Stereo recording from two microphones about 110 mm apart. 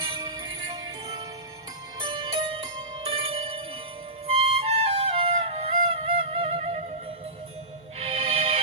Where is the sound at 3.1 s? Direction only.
55° right (ahead or behind).